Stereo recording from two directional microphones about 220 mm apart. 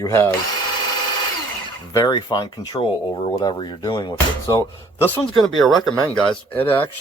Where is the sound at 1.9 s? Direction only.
20° left (ahead or behind).